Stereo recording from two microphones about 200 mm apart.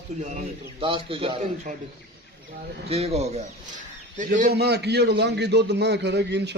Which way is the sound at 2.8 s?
30° right (ahead or behind).